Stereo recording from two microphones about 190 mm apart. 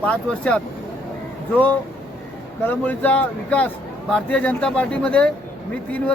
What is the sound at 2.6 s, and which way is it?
A man's voice, 10° left (ahead or behind).